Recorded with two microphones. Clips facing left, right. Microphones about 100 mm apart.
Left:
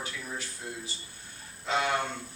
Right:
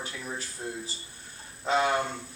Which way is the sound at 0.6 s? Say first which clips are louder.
Right 3 dB; 25° right (ahead or behind).